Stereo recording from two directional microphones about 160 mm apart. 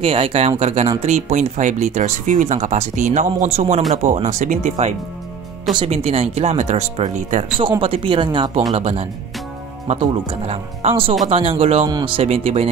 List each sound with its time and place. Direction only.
0.0 s speech: 35° right (ahead or behind)
7.8 s speech: 35° right (ahead or behind)